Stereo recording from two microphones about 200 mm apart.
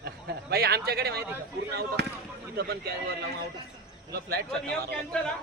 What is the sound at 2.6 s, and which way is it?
Speech, 50° right (ahead or behind).